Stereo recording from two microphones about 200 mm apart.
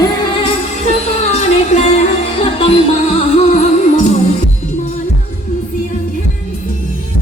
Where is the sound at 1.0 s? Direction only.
35° left (ahead or behind).